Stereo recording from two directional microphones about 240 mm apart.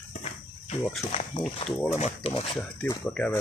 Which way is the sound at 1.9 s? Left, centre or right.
Left.